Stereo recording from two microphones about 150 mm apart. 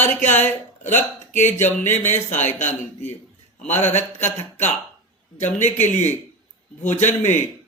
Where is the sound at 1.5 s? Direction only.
50° left (ahead or behind).